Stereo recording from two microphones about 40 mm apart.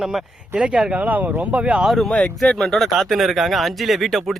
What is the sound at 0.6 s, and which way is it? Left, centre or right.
Speech, right.